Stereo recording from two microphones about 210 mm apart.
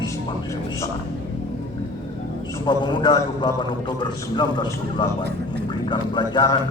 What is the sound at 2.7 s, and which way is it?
A man's voice, 20° left (ahead or behind).